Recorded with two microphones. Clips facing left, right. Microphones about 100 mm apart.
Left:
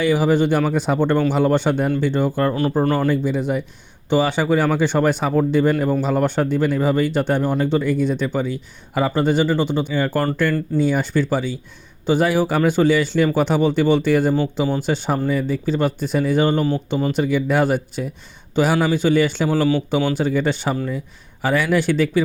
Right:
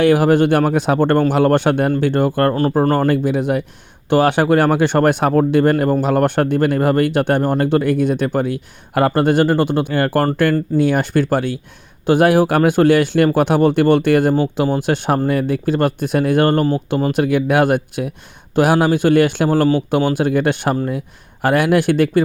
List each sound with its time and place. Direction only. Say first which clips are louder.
0.0 s speech: right 4 dB; 65° right (ahead or behind); by 3.1 s 45° right (ahead or behind)
3.1 s speech: right 3 dB; 65° right (ahead or behind)